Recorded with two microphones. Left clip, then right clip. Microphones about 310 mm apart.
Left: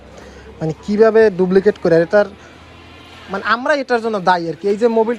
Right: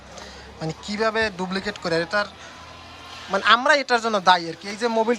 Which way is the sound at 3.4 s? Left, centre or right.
Centre.